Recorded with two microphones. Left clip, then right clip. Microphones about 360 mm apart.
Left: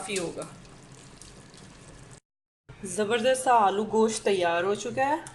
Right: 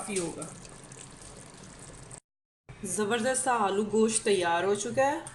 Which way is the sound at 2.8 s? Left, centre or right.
Centre.